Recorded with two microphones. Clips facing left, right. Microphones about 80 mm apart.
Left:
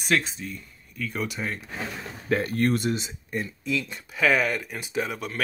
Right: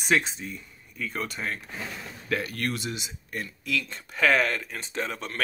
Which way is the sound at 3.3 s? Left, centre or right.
Left.